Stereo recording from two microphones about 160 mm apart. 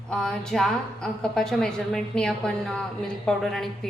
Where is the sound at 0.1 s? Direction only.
5° left (ahead or behind).